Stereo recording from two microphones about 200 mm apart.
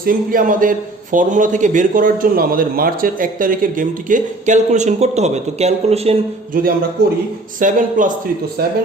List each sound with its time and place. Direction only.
0.0 s a man's voice: 45° right (ahead or behind)
7.6 s a man's voice: 40° right (ahead or behind)